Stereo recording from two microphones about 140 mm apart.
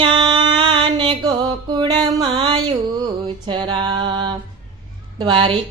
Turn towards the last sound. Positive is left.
turn(degrees=-35)  # may be behind; listen again after turning